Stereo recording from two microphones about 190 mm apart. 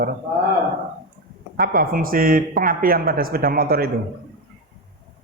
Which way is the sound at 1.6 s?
50° right (ahead or behind).